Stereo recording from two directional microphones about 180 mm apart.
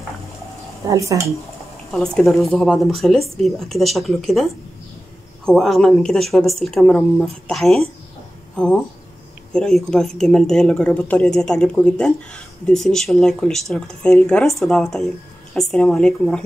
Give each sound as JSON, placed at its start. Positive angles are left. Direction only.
{"t": 0.8, "sound": "speech", "side_deg": -15}
{"t": 1.9, "sound": "speech", "side_deg": 0}
{"t": 9.5, "sound": "speech", "side_deg": 5}